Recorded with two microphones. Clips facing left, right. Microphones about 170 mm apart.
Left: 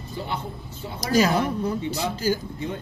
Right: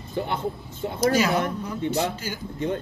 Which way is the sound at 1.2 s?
40° left (ahead or behind).